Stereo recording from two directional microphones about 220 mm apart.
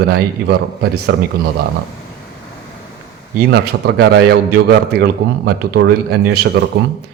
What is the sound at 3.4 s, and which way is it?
A man's voice, 45° right (ahead or behind).